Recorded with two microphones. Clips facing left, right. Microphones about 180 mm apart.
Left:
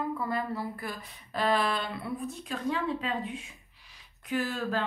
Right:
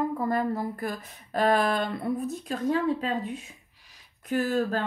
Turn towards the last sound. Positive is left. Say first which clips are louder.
# right 5 dB
turn(degrees=-45)  # may be behind; listen again after turning